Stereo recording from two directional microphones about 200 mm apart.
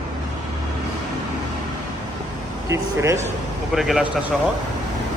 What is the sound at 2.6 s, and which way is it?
Speech, 15° right (ahead or behind).